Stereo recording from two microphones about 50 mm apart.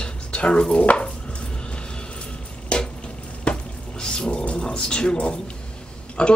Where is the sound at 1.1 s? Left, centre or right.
Centre.